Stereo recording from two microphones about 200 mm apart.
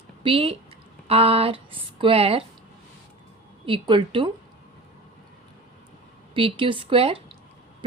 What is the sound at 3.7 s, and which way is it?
Speech, 25° right (ahead or behind).